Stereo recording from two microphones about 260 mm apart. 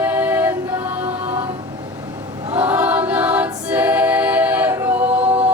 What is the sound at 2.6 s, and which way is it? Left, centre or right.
A capella, centre.